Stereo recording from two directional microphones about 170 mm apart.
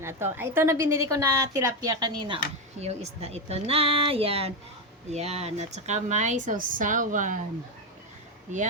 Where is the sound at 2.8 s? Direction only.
40° right (ahead or behind).